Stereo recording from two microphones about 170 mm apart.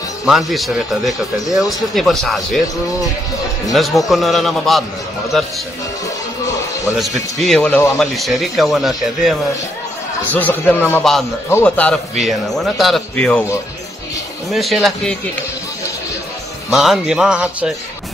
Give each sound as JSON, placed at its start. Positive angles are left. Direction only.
{"t": 0.2, "sound": "speech", "side_deg": 0}
{"t": 3.7, "sound": "speech", "side_deg": 0}
{"t": 6.4, "sound": "music", "side_deg": 20}
{"t": 7.0, "sound": "speech", "side_deg": 0}
{"t": 10.3, "sound": "speech", "side_deg": 10}
{"t": 14.5, "sound": "speech", "side_deg": 0}
{"t": 16.7, "sound": "speech", "side_deg": 0}